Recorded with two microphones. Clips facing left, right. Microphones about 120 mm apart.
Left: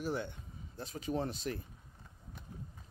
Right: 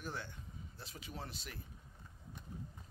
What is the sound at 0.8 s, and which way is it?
Speech, 40° left (ahead or behind).